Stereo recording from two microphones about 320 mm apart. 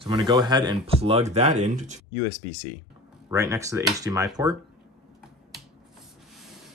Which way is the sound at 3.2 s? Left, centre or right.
Centre.